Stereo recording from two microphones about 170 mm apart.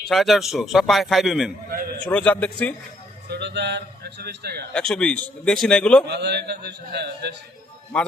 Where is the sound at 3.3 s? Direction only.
90° right.